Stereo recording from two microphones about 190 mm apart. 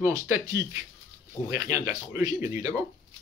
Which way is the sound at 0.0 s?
15° right (ahead or behind).